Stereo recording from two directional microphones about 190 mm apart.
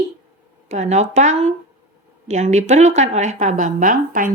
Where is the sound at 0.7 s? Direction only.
35° right (ahead or behind).